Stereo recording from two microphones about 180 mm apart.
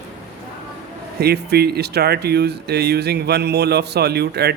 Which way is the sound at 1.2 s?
60° right (ahead or behind).